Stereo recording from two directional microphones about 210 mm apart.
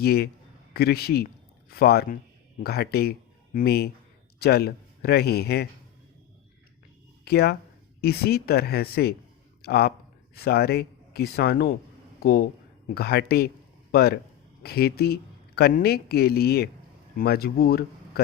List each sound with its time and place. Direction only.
0.0 s speech: 50° left (ahead or behind)
7.3 s speech: 50° left (ahead or behind)